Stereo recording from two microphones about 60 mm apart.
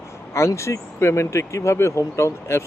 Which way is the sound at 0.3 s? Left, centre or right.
Left.